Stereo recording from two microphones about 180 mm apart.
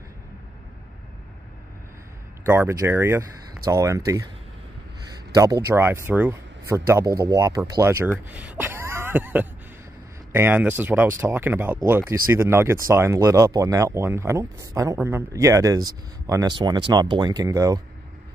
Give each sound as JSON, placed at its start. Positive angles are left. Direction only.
{"t": 2.4, "sound": "speech", "side_deg": -15}
{"t": 5.3, "sound": "speech", "side_deg": -20}
{"t": 8.3, "sound": "a sound", "side_deg": -10}
{"t": 10.3, "sound": "speech", "side_deg": -10}